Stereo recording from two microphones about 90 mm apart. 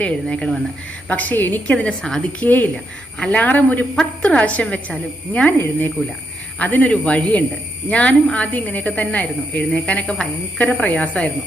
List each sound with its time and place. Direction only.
0.0 s a woman's voice: 10° left (ahead or behind)
1.0 s a woman's voice: 20° left (ahead or behind)